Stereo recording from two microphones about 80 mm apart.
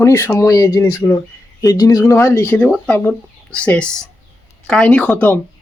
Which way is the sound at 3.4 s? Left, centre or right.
Centre.